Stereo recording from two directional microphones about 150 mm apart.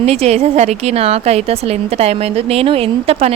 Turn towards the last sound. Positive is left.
turn(degrees=-40)  # may be behind; listen again after turning